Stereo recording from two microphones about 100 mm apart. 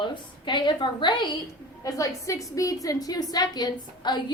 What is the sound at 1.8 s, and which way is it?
A woman's voice, 35° left (ahead or behind).